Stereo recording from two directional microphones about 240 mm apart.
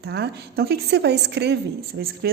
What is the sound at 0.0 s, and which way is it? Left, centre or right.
A woman's voice, right.